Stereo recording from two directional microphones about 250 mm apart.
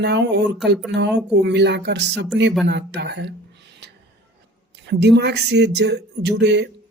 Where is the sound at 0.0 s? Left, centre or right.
Right.